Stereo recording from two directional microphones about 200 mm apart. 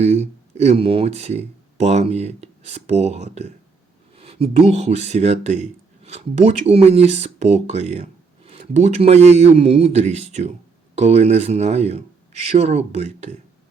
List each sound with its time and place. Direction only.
0.0 s speech: 30° right (ahead or behind)